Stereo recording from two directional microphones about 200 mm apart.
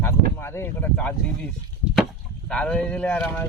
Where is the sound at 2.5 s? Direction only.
5° left (ahead or behind).